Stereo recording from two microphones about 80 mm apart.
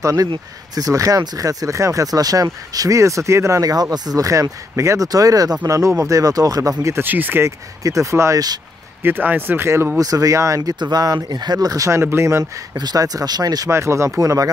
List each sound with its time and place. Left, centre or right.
0.0 s speech: right
3.7 s speech: right
7.1 s speech: right
7.4 s speech: right
9.0 s speech: right
9.9 s speech: right
10.8 s speech: right
12.0 s speech: right
12.7 s speech: right
13.7 s speech: right